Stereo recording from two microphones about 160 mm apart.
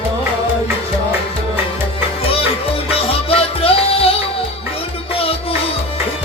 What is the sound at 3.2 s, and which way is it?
Music, 35° left (ahead or behind).